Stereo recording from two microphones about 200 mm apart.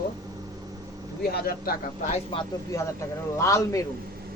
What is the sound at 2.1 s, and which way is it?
Speech, 25° left (ahead or behind).